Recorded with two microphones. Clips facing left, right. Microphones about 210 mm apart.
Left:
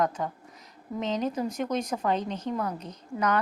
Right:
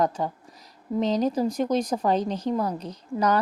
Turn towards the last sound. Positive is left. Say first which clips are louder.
# right 4 dB
turn(degrees=-35)  # may be behind; listen again after turning